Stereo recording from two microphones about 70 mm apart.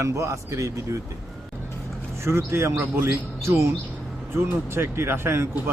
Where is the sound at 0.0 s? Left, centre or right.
Right.